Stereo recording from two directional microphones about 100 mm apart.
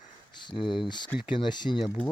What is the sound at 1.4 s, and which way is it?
Speech, 50° left (ahead or behind).